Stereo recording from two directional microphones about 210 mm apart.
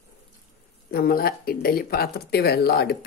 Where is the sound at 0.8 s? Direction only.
45° left (ahead or behind).